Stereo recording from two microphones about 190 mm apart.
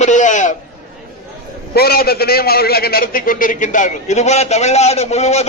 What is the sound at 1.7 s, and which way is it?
A man's voice, 55° left (ahead or behind).